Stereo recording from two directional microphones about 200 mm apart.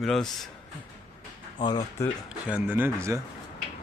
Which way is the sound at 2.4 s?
5° right (ahead or behind).